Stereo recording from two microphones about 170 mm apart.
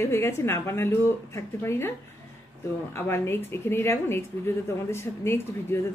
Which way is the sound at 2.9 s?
15° left (ahead or behind).